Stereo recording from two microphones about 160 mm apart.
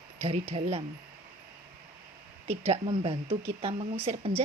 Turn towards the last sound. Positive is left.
turn(degrees=-40)  # may be behind; listen again after turning